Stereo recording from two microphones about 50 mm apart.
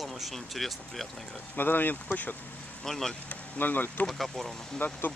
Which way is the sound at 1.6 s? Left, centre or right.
Left.